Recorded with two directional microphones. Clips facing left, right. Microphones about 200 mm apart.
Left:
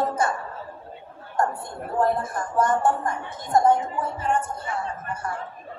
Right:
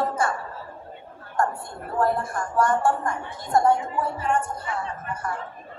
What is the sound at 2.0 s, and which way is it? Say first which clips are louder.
A woman's voice: even; 20° left (ahead or behind).